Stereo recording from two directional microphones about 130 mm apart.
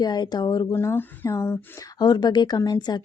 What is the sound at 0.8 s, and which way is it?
Speech, 20° left (ahead or behind).